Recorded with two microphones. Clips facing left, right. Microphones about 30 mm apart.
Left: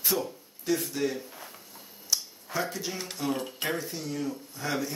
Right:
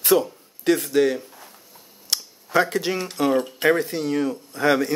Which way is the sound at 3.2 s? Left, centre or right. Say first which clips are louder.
Right 11 dB; right.